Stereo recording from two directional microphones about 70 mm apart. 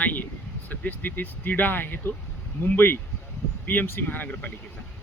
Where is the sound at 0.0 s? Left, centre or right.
Left.